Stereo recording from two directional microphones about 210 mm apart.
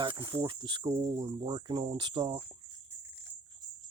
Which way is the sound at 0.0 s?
20° right (ahead or behind).